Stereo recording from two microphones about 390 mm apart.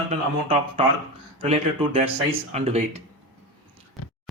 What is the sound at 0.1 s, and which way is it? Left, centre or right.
Speech, centre.